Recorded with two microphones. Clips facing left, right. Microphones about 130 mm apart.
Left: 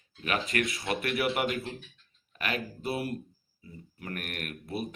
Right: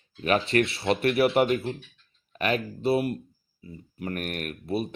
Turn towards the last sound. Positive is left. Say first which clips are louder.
# right 6 dB
turn(degrees=-25)  # may be behind; listen again after turning